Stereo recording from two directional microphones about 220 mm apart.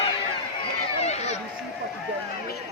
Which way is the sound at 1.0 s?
30° left (ahead or behind).